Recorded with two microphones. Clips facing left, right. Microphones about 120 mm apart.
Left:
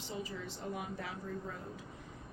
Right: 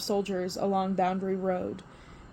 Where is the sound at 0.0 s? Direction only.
75° right (ahead or behind).